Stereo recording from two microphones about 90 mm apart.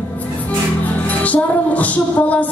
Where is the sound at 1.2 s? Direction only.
15° left (ahead or behind).